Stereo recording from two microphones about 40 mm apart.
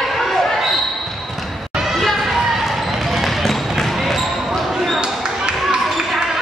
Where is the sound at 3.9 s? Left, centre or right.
Centre.